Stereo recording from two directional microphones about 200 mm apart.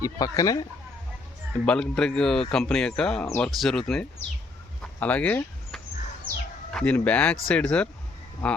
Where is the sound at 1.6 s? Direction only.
5° left (ahead or behind).